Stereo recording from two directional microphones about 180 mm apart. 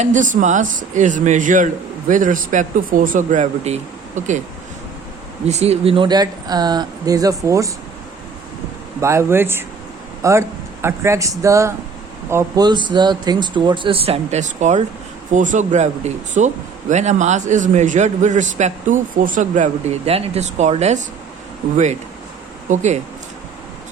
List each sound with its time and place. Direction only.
0.0 s speech: 45° right (ahead or behind)
5.5 s speech: 35° right (ahead or behind); by 7.7 s 15° right (ahead or behind)
9.0 s a man's voice: 15° right (ahead or behind); by 21.0 s 40° right (ahead or behind)
22.7 s a man's voice: 40° right (ahead or behind)